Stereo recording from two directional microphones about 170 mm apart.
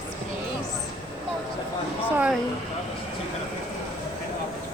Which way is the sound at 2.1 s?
5° right (ahead or behind).